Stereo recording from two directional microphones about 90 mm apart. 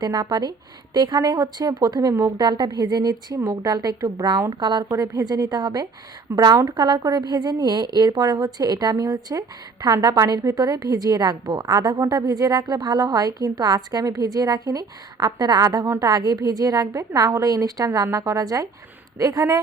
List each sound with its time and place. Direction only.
0.0 s a woman's voice: 45° right (ahead or behind)
4.9 s a woman's voice: 45° right (ahead or behind)
6.3 s speech: 30° right (ahead or behind)
6.7 s a woman's voice: 50° right (ahead or behind)